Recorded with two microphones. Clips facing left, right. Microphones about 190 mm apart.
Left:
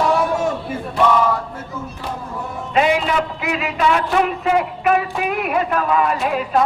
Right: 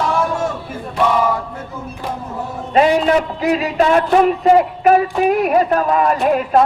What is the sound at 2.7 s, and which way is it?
A man's voice, 40° right (ahead or behind).